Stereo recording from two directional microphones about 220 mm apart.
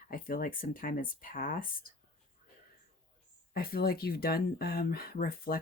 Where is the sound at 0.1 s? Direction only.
40° left (ahead or behind).